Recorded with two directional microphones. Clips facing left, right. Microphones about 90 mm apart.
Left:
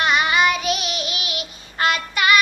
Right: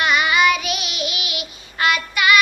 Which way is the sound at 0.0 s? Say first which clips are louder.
Right 1 dB; 35° left (ahead or behind).